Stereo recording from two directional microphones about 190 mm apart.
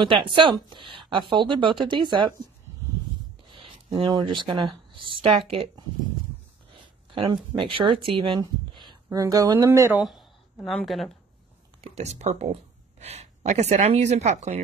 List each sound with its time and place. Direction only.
0.0 s a woman's voice: 25° right (ahead or behind)
3.5 s speech: 25° right (ahead or behind)
10.0 s speech: centre (ahead or behind)
11.8 s speech: 35° right (ahead or behind)